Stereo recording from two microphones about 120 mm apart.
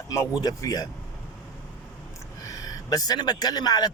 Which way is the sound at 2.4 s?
30° left (ahead or behind).